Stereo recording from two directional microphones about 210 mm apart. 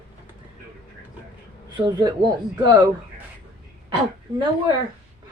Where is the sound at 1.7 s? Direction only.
20° right (ahead or behind).